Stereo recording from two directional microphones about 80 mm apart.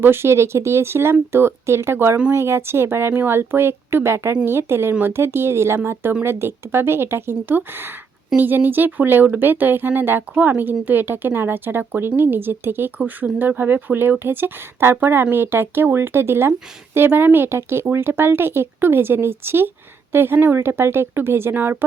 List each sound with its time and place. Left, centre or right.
0.0 s a woman's voice: right